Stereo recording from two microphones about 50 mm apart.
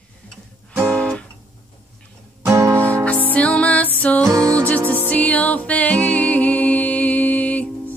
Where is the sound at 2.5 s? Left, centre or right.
Right.